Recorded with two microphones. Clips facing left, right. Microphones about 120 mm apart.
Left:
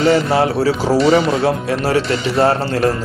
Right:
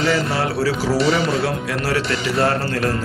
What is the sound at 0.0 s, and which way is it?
A man's voice, 30° left (ahead or behind).